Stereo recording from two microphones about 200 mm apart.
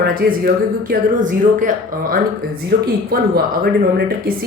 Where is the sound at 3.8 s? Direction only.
50° right (ahead or behind).